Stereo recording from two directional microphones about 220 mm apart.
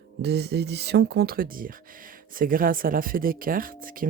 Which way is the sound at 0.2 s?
50° right (ahead or behind).